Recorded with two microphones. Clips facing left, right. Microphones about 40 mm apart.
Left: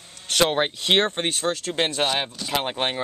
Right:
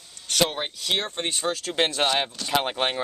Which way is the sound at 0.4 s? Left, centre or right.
Left.